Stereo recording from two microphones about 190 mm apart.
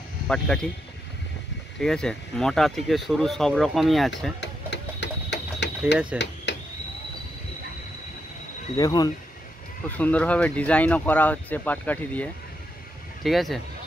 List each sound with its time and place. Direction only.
0.3 s speech: 5° left (ahead or behind)
1.8 s speech: 5° left (ahead or behind)
4.4 s a sound: 65° left (ahead or behind)
8.7 s speech: 20° left (ahead or behind)
9.8 s speech: 10° left (ahead or behind)